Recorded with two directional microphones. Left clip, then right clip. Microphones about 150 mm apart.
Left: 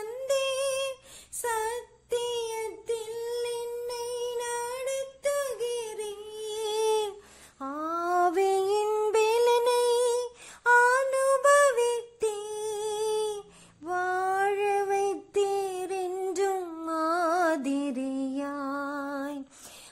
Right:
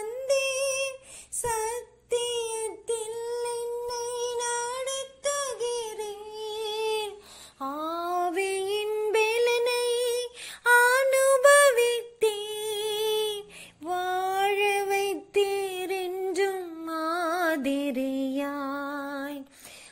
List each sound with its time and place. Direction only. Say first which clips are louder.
0.3 s humming: right 1 dB; centre (ahead or behind)
1.4 s child singing: even; 5° right (ahead or behind)
3.8 s music: right 2 dB; 15° left (ahead or behind); by 7.1 s 35° left (ahead or behind)
7.6 s female singing: even; 10° left (ahead or behind)
10.6 s female singing: right 1 dB; 5° right (ahead or behind)
14.3 s music: right 3 dB; 5° right (ahead or behind)
15.0 s child singing: right 1 dB; centre (ahead or behind)
16.2 s female singing: right 1 dB; 10° left (ahead or behind)
16.8 s music: left 1 dB; centre (ahead or behind)